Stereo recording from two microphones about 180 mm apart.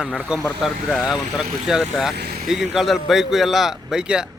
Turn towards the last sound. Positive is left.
turn(degrees=-5)  # may be behind; listen again after turning